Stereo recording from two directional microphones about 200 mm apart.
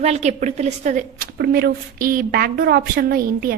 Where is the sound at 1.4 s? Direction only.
50° right (ahead or behind).